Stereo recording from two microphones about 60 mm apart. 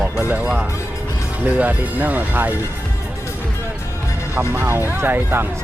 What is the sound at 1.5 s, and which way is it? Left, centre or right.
Speech, right.